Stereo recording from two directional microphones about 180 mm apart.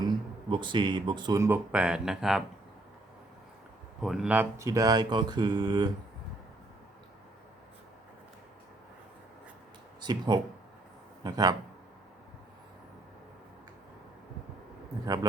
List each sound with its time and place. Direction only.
0.5 s speech: 25° right (ahead or behind); by 2.4 s 5° right (ahead or behind)
4.0 s speech: centre (ahead or behind); by 5.9 s 25° right (ahead or behind)
10.0 s speech: 25° right (ahead or behind)
15.0 s speech: 20° right (ahead or behind)